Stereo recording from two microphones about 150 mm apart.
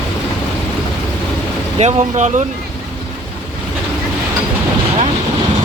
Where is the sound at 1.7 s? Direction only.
45° right (ahead or behind).